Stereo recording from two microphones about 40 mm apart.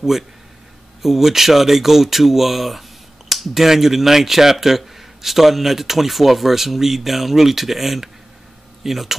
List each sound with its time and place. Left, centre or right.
1.0 s speech: centre